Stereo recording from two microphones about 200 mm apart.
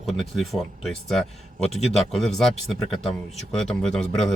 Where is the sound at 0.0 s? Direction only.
Centre (ahead or behind).